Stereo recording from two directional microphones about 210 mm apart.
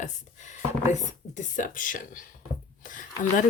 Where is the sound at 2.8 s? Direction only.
40° left (ahead or behind).